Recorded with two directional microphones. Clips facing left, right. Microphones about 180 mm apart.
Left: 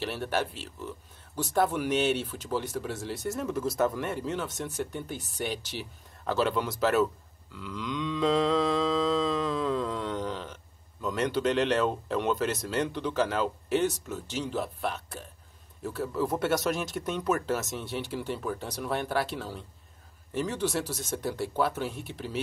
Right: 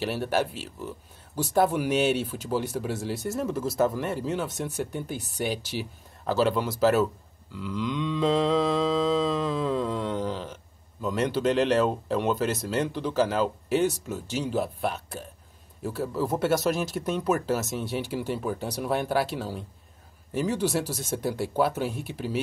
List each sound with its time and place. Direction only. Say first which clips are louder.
0.0 s speech: right 4 dB; 10° right (ahead or behind)
7.5 s mantra: right 5 dB; centre (ahead or behind)
15.8 s speech: right 2 dB; 10° right (ahead or behind)